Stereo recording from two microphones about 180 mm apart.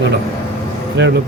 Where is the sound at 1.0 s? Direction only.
75° right (ahead or behind).